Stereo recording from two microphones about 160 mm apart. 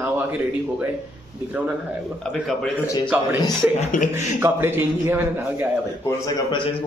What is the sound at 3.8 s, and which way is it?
Speech, 55° left (ahead or behind).